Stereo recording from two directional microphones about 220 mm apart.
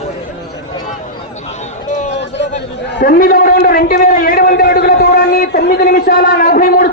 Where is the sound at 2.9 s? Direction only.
40° left (ahead or behind).